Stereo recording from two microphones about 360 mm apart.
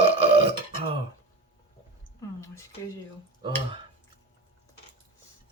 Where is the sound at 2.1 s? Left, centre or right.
Centre.